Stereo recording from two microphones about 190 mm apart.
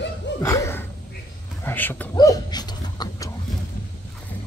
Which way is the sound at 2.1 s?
20° left (ahead or behind).